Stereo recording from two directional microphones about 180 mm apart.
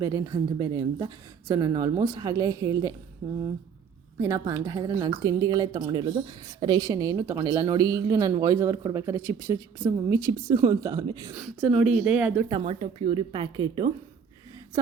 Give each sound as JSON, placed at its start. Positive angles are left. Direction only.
{"t": 0.0, "sound": "a woman's voice", "side_deg": -15}
{"t": 4.2, "sound": "a woman's voice", "side_deg": -20}
{"t": 11.3, "sound": "speech", "side_deg": 0}
{"t": 12.5, "sound": "a woman's voice", "side_deg": -30}